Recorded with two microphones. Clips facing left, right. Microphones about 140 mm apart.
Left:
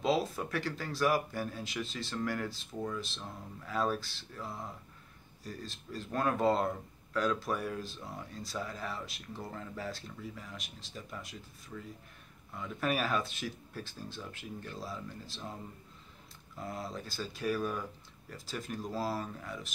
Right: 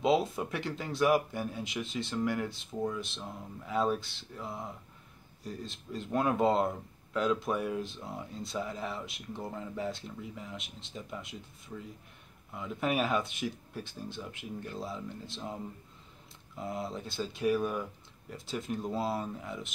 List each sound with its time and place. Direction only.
0.0 s speech: 20° right (ahead or behind)
16.5 s speech: 20° right (ahead or behind)